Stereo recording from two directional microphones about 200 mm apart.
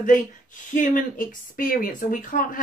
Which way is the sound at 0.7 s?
40° left (ahead or behind).